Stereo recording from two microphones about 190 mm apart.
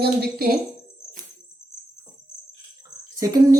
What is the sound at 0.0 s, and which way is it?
Speech, 55° right (ahead or behind).